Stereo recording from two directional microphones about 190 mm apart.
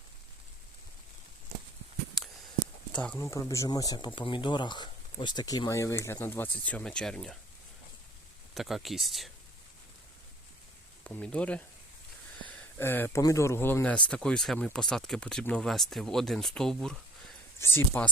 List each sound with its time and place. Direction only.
2.2 s a sound: centre (ahead or behind)
2.9 s speech: 5° left (ahead or behind)
8.5 s speech: centre (ahead or behind)
11.0 s speech: 5° left (ahead or behind)